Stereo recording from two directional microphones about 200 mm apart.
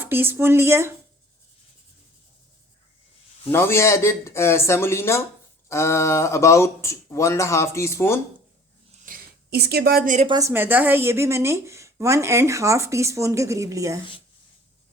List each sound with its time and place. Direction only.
0.0 s speech: 10° right (ahead or behind)
3.5 s speech: 10° left (ahead or behind)
9.0 s a sound: 50° right (ahead or behind)
10.2 s speech: 20° right (ahead or behind)